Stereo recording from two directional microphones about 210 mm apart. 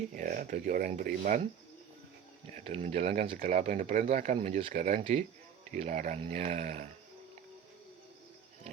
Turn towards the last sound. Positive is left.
turn(degrees=-30)  # may be behind; listen again after turning